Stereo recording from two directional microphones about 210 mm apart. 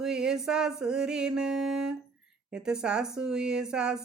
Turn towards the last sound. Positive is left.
turn(degrees=-5)  # may be behind; listen again after turning